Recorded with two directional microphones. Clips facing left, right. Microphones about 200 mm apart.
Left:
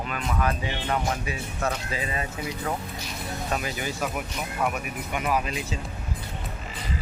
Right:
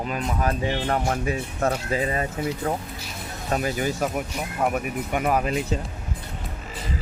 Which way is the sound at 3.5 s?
40° right (ahead or behind).